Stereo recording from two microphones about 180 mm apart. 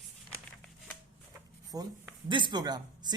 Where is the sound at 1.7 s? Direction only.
20° right (ahead or behind).